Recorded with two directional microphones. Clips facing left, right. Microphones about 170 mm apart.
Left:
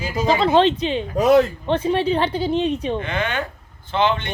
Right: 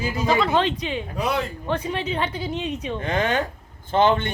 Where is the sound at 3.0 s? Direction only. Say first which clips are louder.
Right 2 dB; 40° right (ahead or behind).